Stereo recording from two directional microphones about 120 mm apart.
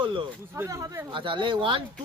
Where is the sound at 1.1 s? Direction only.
45° right (ahead or behind).